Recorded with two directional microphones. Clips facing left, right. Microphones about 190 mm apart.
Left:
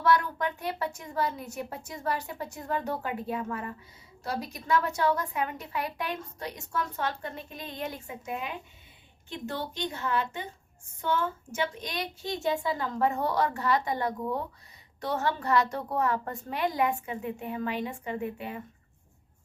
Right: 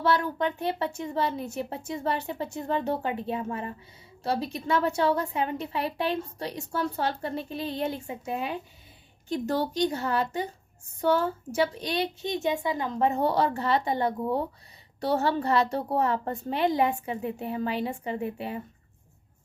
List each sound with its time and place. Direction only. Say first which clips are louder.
0.0 s a woman's voice: right 1 dB; 30° right (ahead or behind)
12.2 s a woman's voice: right 2 dB; 20° right (ahead or behind)